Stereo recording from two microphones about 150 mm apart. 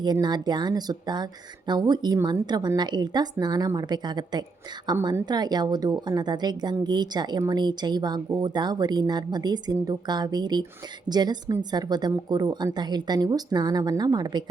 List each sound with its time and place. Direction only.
0.0 s a woman's voice: 30° right (ahead or behind)